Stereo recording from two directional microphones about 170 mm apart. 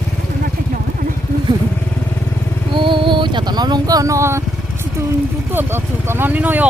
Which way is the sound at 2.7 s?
30° right (ahead or behind).